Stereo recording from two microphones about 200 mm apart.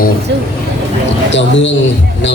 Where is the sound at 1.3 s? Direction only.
65° left (ahead or behind).